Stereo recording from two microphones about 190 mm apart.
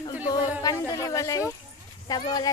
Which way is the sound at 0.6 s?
15° left (ahead or behind).